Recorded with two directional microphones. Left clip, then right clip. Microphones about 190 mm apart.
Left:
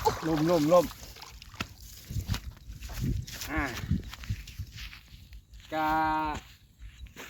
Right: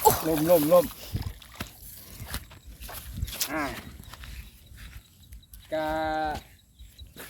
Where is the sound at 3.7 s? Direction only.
10° left (ahead or behind).